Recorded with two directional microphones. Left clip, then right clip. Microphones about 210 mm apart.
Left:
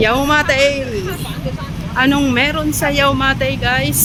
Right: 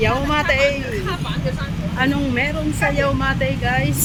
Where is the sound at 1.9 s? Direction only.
25° left (ahead or behind).